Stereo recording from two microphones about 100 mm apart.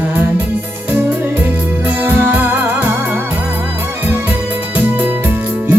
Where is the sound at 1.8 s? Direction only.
20° right (ahead or behind).